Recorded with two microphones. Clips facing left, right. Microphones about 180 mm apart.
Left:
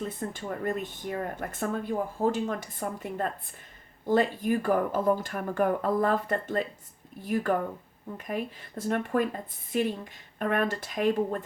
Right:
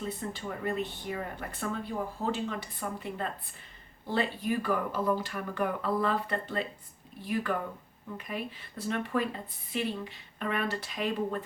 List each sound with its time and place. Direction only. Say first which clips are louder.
0.2 s speech: left 3 dB; 45° left (ahead or behind)